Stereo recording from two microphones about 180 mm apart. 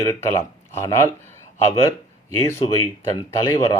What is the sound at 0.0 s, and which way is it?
Speech, 15° left (ahead or behind).